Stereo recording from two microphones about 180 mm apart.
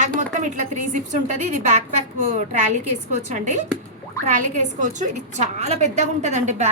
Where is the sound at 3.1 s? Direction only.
40° right (ahead or behind).